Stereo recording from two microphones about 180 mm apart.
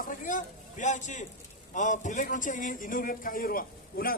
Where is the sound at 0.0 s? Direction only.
45° left (ahead or behind).